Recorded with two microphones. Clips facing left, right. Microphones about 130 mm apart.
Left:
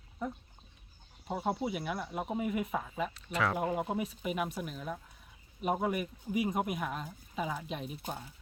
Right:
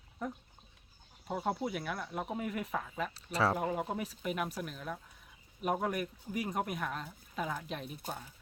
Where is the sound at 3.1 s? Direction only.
35° right (ahead or behind).